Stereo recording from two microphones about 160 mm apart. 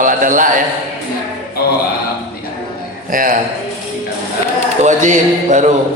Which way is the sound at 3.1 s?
60° right (ahead or behind).